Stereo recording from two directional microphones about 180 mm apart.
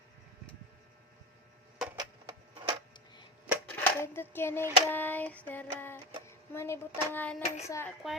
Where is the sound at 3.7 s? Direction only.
10° left (ahead or behind).